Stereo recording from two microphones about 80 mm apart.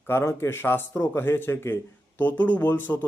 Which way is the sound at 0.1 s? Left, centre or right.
Left.